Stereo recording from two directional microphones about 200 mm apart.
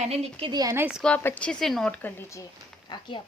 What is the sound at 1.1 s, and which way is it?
Speech, 10° left (ahead or behind).